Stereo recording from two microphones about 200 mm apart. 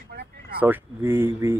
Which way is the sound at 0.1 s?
55° right (ahead or behind).